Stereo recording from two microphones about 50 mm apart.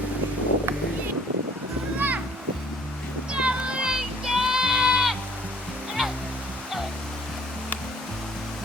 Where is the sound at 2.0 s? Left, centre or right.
Right.